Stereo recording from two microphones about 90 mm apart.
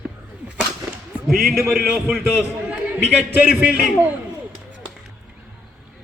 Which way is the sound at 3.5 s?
15° right (ahead or behind).